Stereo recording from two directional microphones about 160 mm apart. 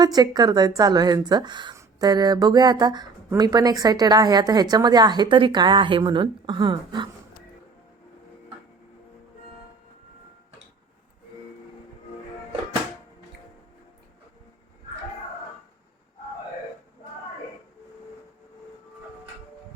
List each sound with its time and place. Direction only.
0.0 s speech: 25° right (ahead or behind)